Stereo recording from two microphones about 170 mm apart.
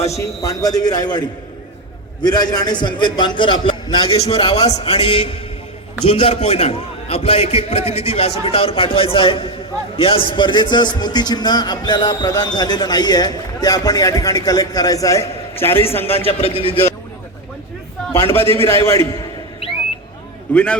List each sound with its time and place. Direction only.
0.4 s a man's voice: 20° left (ahead or behind)
2.2 s a man's voice: 20° left (ahead or behind)
16.2 s a man's voice: 35° left (ahead or behind)
18.6 s a man's voice: 15° left (ahead or behind)
20.5 s a man's voice: 5° left (ahead or behind)